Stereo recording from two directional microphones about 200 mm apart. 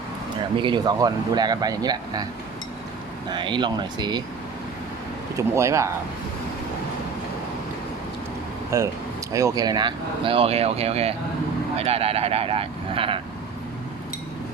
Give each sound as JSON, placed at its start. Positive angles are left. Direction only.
{"t": 0.5, "sound": "speech", "side_deg": -25}
{"t": 3.2, "sound": "speech", "side_deg": -25}
{"t": 5.4, "sound": "speech", "side_deg": -15}
{"t": 8.7, "sound": "speech", "side_deg": -15}